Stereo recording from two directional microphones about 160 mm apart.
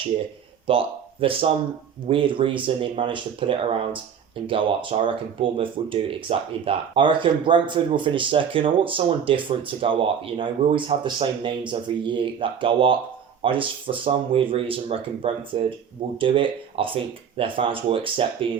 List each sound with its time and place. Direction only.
0.7 s speech: 35° right (ahead or behind)